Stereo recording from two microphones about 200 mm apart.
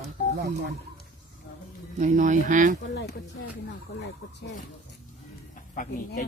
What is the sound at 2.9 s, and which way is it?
Speech, 55° left (ahead or behind).